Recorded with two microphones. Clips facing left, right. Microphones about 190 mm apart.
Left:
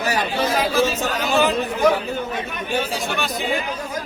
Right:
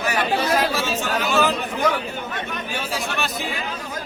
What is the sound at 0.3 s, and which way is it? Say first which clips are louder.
Chatter: left 4 dB; centre (ahead or behind).